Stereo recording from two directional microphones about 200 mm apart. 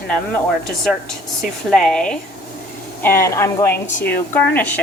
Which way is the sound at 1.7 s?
5° left (ahead or behind).